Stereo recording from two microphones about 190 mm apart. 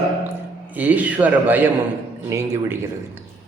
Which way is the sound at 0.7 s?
10° right (ahead or behind).